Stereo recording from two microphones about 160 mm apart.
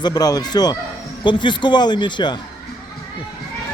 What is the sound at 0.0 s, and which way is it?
Speech, 25° left (ahead or behind).